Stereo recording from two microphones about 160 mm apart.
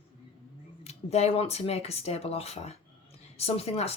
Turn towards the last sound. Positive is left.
turn(degrees=40)  # may be behind; listen again after turning